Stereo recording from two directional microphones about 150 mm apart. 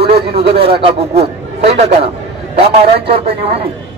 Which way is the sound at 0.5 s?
90° right.